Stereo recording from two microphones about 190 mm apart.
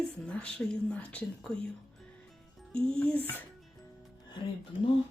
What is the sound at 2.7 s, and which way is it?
Speech, 5° left (ahead or behind).